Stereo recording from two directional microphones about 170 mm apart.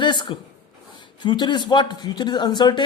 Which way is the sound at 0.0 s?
25° left (ahead or behind).